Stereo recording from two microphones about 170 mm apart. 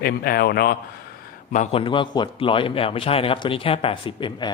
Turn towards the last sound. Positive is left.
turn(degrees=30)  # may be behind; listen again after turning